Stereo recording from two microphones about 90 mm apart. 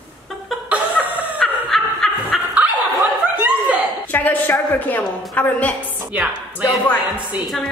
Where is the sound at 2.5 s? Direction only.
20° right (ahead or behind).